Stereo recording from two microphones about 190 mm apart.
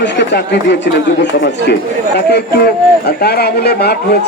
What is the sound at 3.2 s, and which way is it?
Speech, 60° left (ahead or behind).